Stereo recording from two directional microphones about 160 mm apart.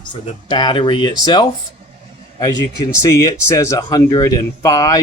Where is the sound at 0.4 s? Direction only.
30° left (ahead or behind).